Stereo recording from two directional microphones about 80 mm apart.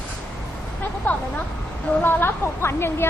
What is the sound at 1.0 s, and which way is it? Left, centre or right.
A woman's voice, left.